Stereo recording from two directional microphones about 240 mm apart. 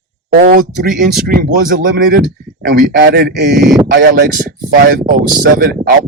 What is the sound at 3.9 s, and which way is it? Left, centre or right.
Speech, right.